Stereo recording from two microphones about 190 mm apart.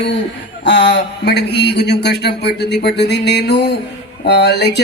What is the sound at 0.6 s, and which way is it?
Speech, 65° left (ahead or behind).